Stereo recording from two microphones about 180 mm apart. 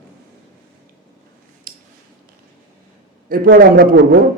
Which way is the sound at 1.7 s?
55° right (ahead or behind).